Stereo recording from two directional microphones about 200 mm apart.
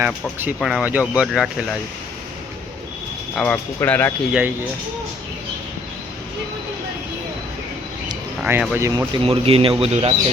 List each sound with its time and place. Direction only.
0.0 s speech: 10° right (ahead or behind)
3.3 s speech: 5° left (ahead or behind)
4.3 s speech: 5° right (ahead or behind)
8.4 s speech: 10° right (ahead or behind)
9.2 s a man's voice: 30° right (ahead or behind)